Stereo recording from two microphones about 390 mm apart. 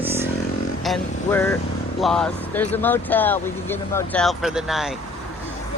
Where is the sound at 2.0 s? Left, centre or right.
Centre.